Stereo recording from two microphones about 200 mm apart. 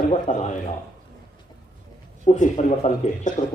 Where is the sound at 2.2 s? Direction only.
40° left (ahead or behind).